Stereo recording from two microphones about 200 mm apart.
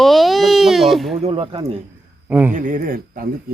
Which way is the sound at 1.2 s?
30° right (ahead or behind).